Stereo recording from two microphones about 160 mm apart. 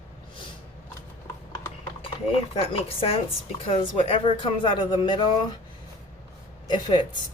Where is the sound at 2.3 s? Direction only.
35° left (ahead or behind).